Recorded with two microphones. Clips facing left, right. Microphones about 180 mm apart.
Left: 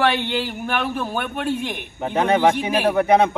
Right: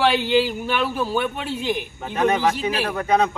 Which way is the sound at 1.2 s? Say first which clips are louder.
Left 2 dB; 55° left (ahead or behind).